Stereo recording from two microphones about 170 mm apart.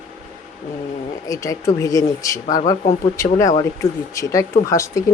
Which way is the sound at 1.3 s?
20° left (ahead or behind).